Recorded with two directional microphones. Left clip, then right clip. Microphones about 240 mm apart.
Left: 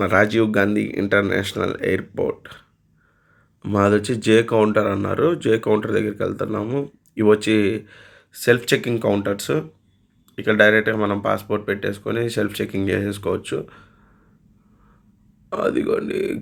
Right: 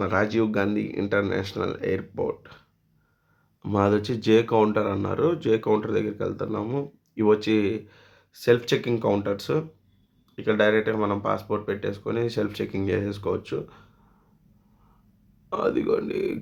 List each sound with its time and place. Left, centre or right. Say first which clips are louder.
0.0 s speech: left 7 dB; centre
15.4 s a man's voice: left 3 dB; centre